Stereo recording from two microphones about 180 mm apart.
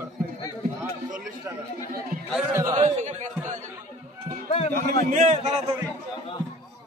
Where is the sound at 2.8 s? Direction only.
40° right (ahead or behind).